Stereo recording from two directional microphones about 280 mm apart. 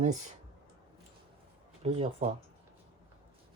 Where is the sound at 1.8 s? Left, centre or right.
Right.